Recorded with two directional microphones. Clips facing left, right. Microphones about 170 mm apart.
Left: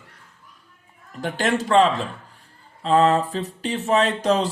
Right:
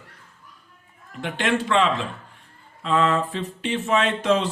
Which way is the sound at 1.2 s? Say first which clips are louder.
Left 1 dB; 40° left (ahead or behind).